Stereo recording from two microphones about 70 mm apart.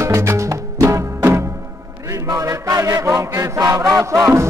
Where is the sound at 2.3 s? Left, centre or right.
Right.